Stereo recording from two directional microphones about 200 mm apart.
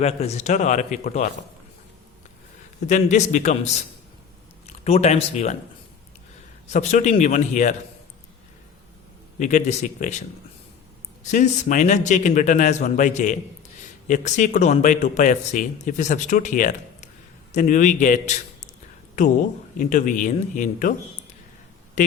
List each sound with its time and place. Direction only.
0.0 s a man's voice: 30° left (ahead or behind)
2.8 s a man's voice: 35° left (ahead or behind)
6.7 s a man's voice: 35° left (ahead or behind)
9.4 s a man's voice: 35° left (ahead or behind)
11.3 s a man's voice: 40° left (ahead or behind)
19.8 s a man's voice: 40° left (ahead or behind)
22.0 s speech: 35° left (ahead or behind)